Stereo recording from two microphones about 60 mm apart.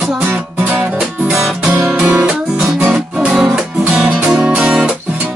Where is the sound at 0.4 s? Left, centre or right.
Right.